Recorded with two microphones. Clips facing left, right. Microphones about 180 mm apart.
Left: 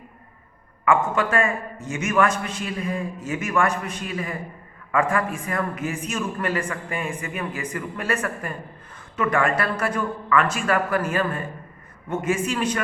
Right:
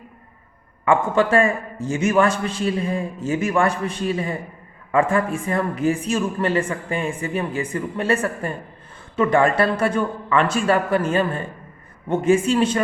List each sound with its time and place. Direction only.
0.9 s a man's voice: 30° right (ahead or behind)